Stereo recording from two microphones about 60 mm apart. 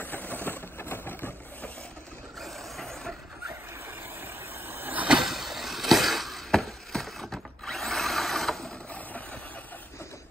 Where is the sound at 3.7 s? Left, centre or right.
Right.